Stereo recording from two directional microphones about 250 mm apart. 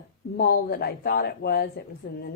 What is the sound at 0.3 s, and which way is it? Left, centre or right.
Speech, left.